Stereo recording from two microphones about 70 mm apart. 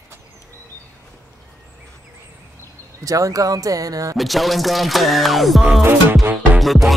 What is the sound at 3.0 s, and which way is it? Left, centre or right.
Speech, right.